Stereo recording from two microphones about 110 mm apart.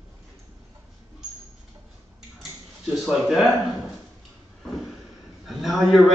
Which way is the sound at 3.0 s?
5° right (ahead or behind).